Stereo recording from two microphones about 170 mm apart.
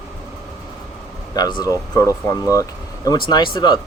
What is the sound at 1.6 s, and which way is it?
Speech, 20° left (ahead or behind).